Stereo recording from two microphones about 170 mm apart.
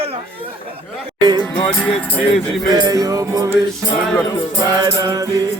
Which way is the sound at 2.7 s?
20° right (ahead or behind).